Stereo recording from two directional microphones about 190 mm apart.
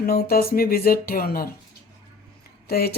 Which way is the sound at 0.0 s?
55° left (ahead or behind).